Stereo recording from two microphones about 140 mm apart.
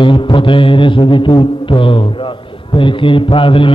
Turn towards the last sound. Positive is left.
turn(degrees=40)  # may be behind; listen again after turning